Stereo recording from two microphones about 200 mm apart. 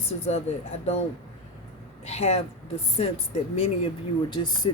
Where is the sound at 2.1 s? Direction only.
30° left (ahead or behind).